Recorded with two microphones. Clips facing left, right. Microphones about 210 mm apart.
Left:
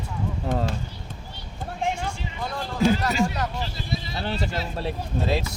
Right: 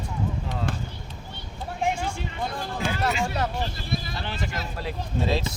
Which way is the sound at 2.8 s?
40° left (ahead or behind).